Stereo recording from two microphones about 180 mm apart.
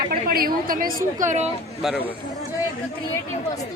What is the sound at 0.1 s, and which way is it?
A woman's voice, 55° right (ahead or behind).